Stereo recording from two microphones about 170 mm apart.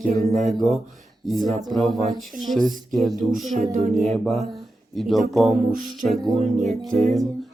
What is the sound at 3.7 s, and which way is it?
Music, 40° right (ahead or behind).